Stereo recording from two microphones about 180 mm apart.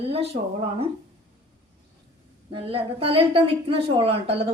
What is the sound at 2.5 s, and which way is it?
A woman's voice, 30° right (ahead or behind).